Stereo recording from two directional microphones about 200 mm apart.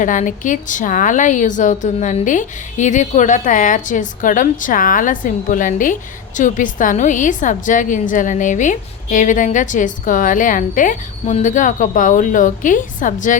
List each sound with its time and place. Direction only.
0.0 s a woman's voice: 40° left (ahead or behind)